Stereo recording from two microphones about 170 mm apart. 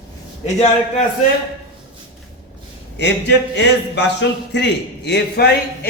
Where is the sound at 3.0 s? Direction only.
90° left; by 5.9 s 70° left (ahead or behind).